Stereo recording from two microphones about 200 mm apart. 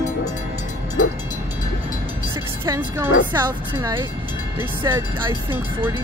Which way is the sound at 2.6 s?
15° right (ahead or behind).